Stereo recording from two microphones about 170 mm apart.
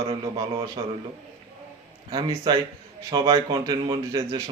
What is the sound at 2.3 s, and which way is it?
Speech, 25° right (ahead or behind).